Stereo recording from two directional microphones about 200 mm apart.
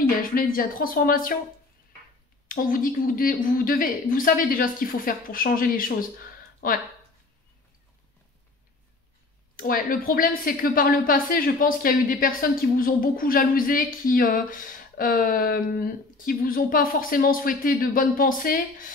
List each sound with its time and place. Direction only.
0.2 s a woman's voice: 45° left (ahead or behind)
2.4 s a woman's voice: 45° left (ahead or behind)
9.6 s a woman's voice: 45° left (ahead or behind)